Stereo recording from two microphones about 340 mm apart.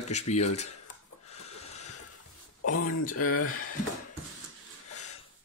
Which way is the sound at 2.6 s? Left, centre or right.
Left.